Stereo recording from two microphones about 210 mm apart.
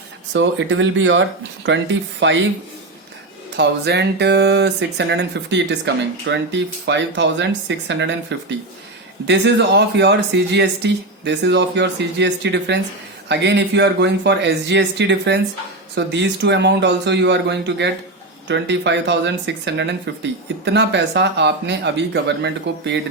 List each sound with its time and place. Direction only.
0.3 s speech: 65° right (ahead or behind)
3.6 s speech: 55° right (ahead or behind)